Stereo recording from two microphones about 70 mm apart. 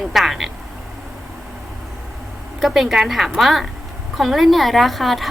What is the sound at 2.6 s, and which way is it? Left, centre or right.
A woman's voice, centre.